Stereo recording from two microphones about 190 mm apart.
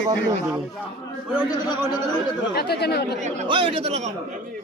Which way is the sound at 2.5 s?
55° left (ahead or behind).